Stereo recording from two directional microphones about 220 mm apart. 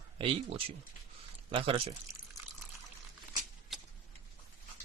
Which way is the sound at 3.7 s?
Centre (ahead or behind).